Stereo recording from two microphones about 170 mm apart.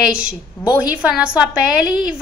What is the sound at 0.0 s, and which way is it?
A woman's voice, 5° right (ahead or behind).